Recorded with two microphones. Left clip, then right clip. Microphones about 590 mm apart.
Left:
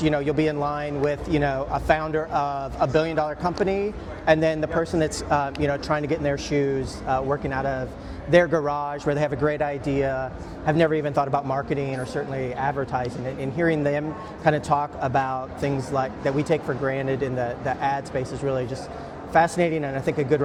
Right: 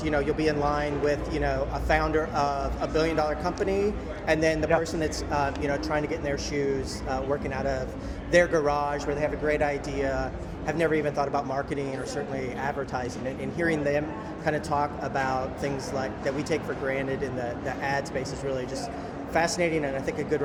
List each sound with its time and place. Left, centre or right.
0.0 s a man's voice: left
7.1 s speech: left
8.3 s a man's voice: left
9.1 s a man's voice: left